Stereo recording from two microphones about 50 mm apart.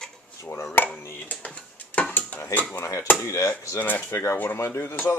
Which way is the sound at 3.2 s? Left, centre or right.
Left.